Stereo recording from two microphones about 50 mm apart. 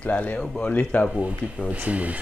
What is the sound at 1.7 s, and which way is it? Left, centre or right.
Speech, right.